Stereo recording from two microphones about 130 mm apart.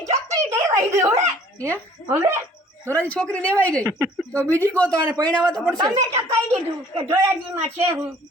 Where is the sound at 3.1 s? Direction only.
10° left (ahead or behind).